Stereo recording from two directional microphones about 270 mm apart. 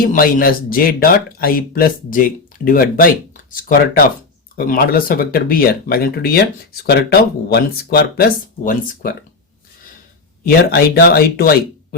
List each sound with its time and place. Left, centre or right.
0.1 s speech: left
10.4 s speech: left